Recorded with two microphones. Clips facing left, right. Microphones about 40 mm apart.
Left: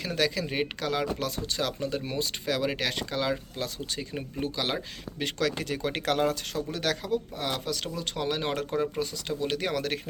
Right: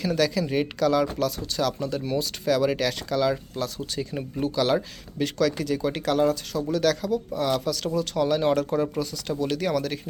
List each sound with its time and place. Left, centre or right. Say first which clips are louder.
0.0 s speech: right 4 dB; centre
5.2 s speech: right 5 dB; left
6.7 s speech: right 7 dB; left